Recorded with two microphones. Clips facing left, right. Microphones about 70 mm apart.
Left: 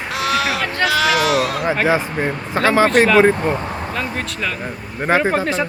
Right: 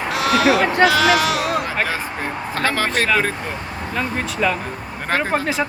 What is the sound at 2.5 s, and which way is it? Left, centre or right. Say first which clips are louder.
Speech: left 7 dB; centre.